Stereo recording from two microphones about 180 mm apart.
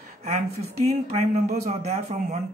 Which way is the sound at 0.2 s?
40° right (ahead or behind).